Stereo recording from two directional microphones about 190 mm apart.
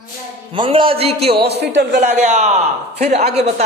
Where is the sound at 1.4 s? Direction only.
60° right (ahead or behind).